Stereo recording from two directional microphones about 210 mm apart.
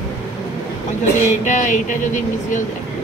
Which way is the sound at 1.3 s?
35° left (ahead or behind).